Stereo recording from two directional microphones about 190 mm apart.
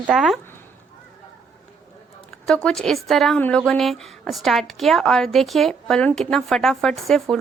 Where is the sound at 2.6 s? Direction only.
5° left (ahead or behind).